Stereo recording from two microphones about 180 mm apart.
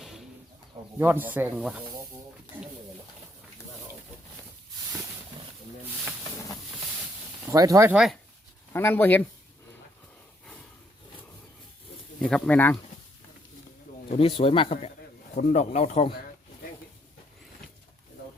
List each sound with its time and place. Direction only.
0.9 s speech: 10° right (ahead or behind)
7.4 s speech: 20° right (ahead or behind)
7.9 s speech: centre (ahead or behind)
8.7 s speech: 10° left (ahead or behind)
12.2 s speech: 5° left (ahead or behind)
14.1 s speech: 30° left (ahead or behind)